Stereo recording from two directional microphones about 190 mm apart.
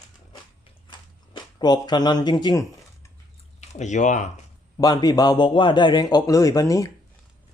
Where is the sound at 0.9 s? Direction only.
20° left (ahead or behind).